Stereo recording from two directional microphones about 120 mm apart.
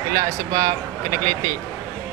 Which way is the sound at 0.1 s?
25° right (ahead or behind).